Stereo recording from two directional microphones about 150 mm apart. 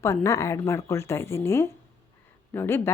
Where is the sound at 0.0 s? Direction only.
20° left (ahead or behind).